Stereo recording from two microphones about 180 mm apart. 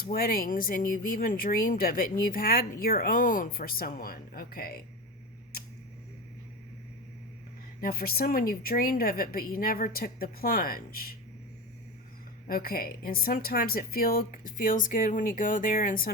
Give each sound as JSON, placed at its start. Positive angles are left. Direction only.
{"t": 0.0, "sound": "speech", "side_deg": 55}
{"t": 7.8, "sound": "a woman's voice", "side_deg": 55}
{"t": 12.5, "sound": "speech", "side_deg": 55}